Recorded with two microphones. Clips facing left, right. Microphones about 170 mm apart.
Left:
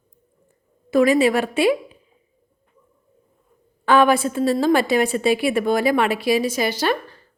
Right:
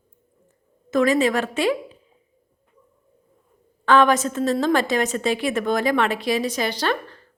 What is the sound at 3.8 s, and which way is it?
Speech, 10° left (ahead or behind).